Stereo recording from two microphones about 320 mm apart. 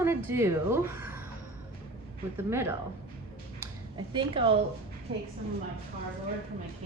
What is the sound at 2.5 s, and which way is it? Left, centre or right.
Speech, centre.